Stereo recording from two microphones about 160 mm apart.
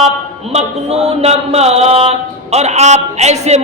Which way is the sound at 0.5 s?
40° right (ahead or behind).